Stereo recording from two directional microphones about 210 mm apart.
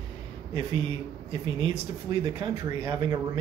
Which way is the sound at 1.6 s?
20° right (ahead or behind).